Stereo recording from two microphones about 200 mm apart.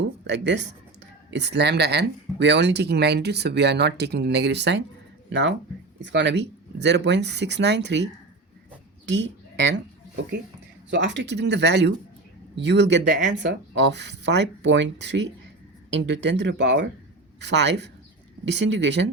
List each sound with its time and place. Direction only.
0.0 s speech: 60° right (ahead or behind)
10.9 s speech: 60° right (ahead or behind)